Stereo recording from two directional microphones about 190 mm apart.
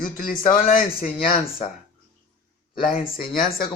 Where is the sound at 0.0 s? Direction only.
45° left (ahead or behind).